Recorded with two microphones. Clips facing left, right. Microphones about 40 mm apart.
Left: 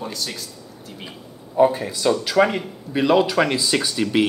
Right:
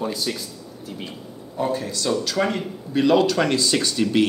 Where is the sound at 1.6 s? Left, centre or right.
Centre.